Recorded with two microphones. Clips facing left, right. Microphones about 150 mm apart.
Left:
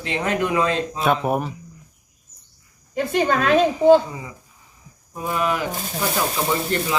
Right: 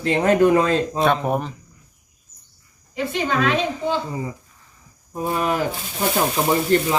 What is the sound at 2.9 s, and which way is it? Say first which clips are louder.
Speech: left 2 dB; 50° left (ahead or behind).